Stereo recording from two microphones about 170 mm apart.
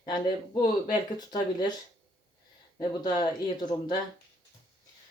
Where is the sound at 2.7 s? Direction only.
25° left (ahead or behind).